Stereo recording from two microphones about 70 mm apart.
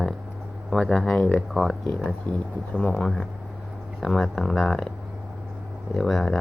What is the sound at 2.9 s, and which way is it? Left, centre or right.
Speech, centre.